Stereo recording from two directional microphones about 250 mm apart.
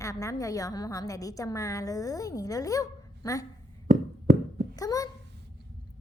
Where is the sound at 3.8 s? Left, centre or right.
Right.